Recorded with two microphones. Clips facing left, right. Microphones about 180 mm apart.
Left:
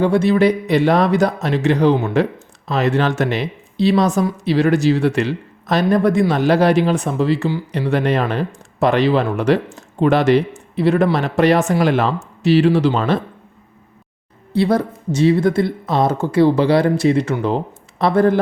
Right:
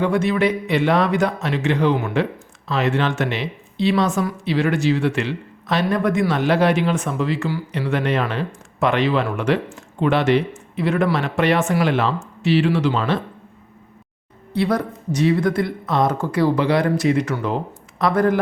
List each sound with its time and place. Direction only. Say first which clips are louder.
0.0 s speech: left 4 dB; 30° left (ahead or behind)
14.5 s speech: left 4 dB; 30° left (ahead or behind)